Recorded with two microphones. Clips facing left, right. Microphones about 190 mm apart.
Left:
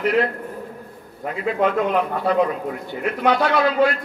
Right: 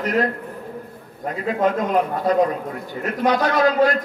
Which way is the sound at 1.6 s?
40° right (ahead or behind).